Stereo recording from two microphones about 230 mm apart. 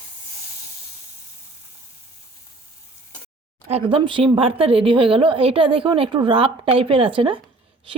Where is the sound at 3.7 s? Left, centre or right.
Right.